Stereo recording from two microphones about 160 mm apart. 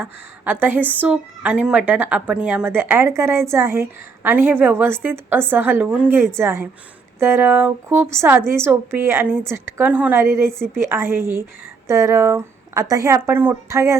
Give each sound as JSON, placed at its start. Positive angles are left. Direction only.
{"t": 0.0, "sound": "speech", "side_deg": -10}